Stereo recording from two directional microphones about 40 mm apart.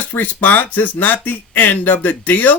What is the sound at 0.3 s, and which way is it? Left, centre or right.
Speech, left.